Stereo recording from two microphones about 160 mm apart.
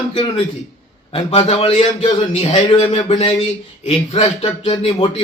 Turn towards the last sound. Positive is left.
turn(degrees=35)  # may be behind; listen again after turning